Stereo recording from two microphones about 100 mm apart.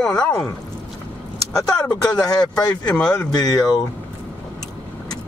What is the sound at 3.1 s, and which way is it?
Speech, 40° left (ahead or behind).